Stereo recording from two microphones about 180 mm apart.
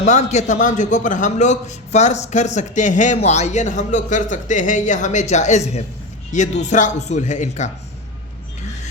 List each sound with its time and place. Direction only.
0.0 s a man's voice: 40° left (ahead or behind)